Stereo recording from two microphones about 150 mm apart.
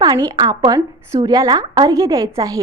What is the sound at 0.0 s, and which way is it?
A woman's voice, 25° right (ahead or behind).